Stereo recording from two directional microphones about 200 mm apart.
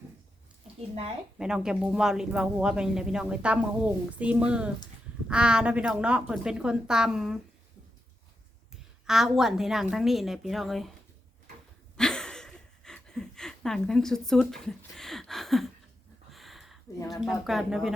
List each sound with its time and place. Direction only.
1.4 s speech: 5° right (ahead or behind)
8.7 s speech: centre (ahead or behind)
11.9 s a sound: 5° left (ahead or behind)
17.1 s speech: centre (ahead or behind)